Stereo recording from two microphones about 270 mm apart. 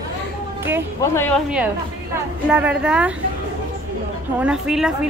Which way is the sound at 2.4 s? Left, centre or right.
Centre.